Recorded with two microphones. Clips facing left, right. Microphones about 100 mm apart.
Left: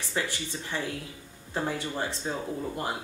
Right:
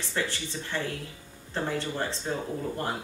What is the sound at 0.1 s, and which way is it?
Speech, 15° left (ahead or behind).